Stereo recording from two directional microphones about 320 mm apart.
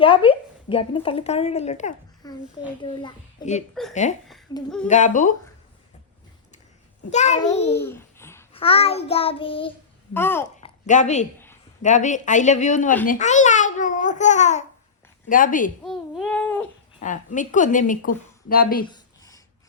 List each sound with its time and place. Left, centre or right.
0.0 s a woman's voice: centre
4.9 s a woman's voice: left
7.1 s a woman's voice: left
7.7 s child singing: centre
10.2 s a child's voice: centre
10.8 s a woman's voice: left
15.8 s babbling: centre
17.0 s a woman's voice: left
18.9 s a sound: centre